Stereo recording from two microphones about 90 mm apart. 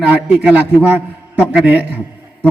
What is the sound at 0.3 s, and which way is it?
Speech, 15° right (ahead or behind).